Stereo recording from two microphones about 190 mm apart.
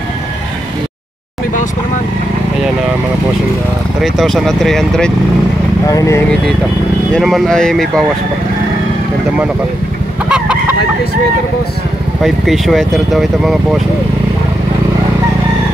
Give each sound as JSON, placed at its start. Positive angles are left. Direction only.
{"t": 4.0, "sound": "speech", "side_deg": 0}
{"t": 5.9, "sound": "speech", "side_deg": 15}
{"t": 7.1, "sound": "speech", "side_deg": 0}
{"t": 10.3, "sound": "chicken", "side_deg": -5}
{"t": 12.2, "sound": "speech", "side_deg": 0}